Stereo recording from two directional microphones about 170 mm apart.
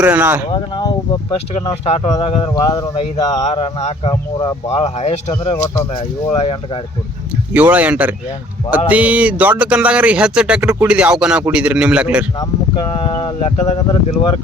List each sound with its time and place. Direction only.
0.0 s speech: 10° right (ahead or behind)
0.5 s speech: 25° left (ahead or behind)
1.6 s speech: 35° left (ahead or behind)
2.5 s speech: 20° left (ahead or behind)
3.4 s speech: 35° left (ahead or behind)
7.5 s speech: 10° right (ahead or behind)
12.4 s speech: 25° left (ahead or behind)
13.4 s speech: 40° left (ahead or behind)